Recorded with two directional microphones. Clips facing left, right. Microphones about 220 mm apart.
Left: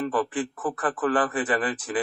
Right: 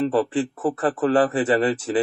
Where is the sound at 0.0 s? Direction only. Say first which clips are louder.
Right 5 dB; 25° right (ahead or behind).